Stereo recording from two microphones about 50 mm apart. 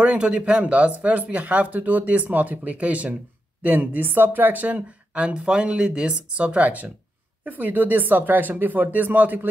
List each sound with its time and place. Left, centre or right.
0.0 s speech: right
4.7 s speech: right
7.4 s speech: right